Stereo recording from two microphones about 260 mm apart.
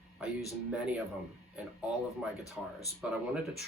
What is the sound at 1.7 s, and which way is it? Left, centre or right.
Speech, centre.